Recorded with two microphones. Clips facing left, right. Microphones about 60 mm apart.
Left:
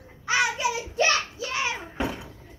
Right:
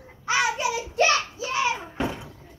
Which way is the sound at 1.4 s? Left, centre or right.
Right.